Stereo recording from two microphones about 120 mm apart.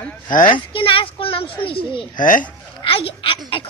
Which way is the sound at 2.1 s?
90° left.